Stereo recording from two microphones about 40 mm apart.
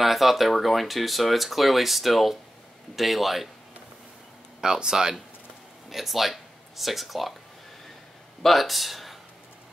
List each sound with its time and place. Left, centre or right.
0.0 s speech: centre
4.6 s speech: centre
5.9 s speech: centre
8.4 s speech: centre